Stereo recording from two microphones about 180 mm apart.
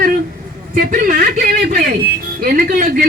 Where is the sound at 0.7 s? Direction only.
50° right (ahead or behind).